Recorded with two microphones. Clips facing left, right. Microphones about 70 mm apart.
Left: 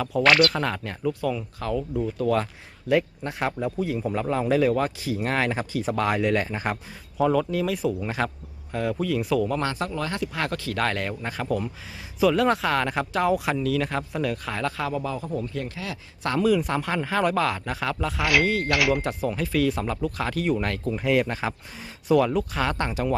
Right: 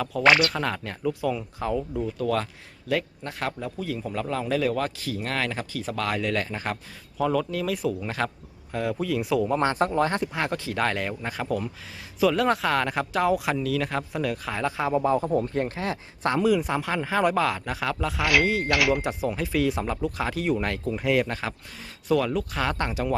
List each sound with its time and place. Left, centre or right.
0.3 s speech: centre
2.1 s a man's voice: centre
9.6 s speech: right
10.3 s speech: centre
14.8 s speech: right
16.3 s speech: centre